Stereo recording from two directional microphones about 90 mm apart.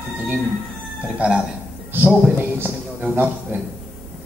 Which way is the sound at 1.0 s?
10° right (ahead or behind).